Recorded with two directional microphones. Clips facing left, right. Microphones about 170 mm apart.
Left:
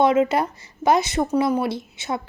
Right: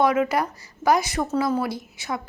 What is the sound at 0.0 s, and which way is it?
A woman's voice, 25° left (ahead or behind).